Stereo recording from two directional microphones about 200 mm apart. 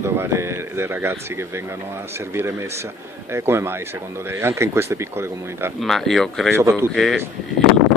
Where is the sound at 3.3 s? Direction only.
15° right (ahead or behind).